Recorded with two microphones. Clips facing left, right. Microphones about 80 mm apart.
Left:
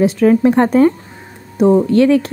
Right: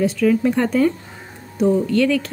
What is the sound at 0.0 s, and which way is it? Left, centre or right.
A woman's voice, left.